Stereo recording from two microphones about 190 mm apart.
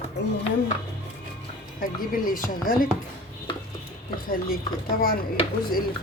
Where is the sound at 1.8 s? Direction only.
45° left (ahead or behind).